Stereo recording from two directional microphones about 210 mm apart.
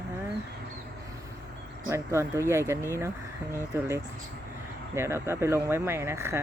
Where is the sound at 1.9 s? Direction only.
15° right (ahead or behind).